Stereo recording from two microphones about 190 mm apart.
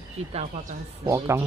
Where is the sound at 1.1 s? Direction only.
15° right (ahead or behind).